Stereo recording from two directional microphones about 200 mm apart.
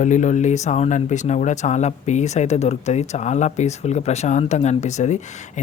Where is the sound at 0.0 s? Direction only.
40° left (ahead or behind).